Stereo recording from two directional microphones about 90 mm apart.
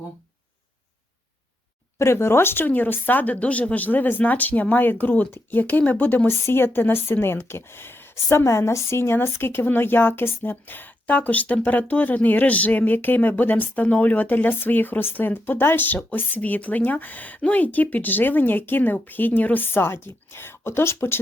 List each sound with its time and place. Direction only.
2.0 s a woman's voice: 30° left (ahead or behind)